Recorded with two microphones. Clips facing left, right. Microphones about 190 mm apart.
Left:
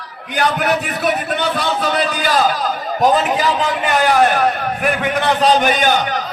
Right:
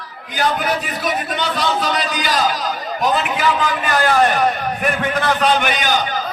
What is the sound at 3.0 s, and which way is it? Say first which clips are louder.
Speech: left 4 dB; 45° left (ahead or behind).